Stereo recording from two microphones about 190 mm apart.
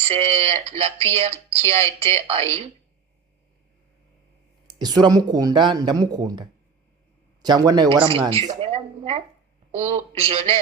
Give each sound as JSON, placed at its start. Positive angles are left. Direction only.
{"t": 0.0, "sound": "speech", "side_deg": -30}
{"t": 4.7, "sound": "speech", "side_deg": -20}
{"t": 7.4, "sound": "speech", "side_deg": -20}